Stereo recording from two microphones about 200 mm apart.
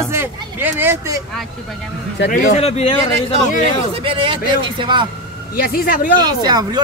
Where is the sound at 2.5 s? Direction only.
30° left (ahead or behind).